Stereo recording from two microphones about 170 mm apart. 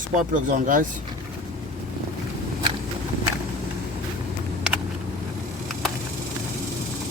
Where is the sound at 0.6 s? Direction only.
50° right (ahead or behind).